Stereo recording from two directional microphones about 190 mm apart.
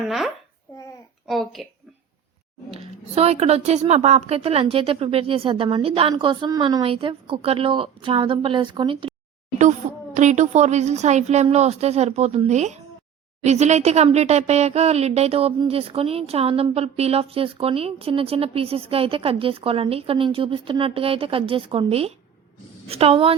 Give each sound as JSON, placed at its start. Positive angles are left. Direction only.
{"t": 0.0, "sound": "a child's voice", "side_deg": 0}
{"t": 0.7, "sound": "a sound", "side_deg": 20}
{"t": 1.3, "sound": "speech", "side_deg": 0}
{"t": 2.6, "sound": "speech", "side_deg": -30}
{"t": 9.8, "sound": "a sound", "side_deg": -35}
{"t": 10.2, "sound": "speech", "side_deg": -40}